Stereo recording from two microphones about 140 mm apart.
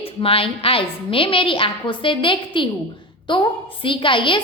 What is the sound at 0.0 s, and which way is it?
A woman's voice, 40° left (ahead or behind).